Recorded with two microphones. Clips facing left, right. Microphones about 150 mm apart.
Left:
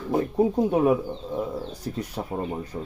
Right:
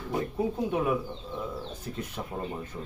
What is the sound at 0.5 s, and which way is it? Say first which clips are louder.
Speech: left 6 dB; 40° left (ahead or behind).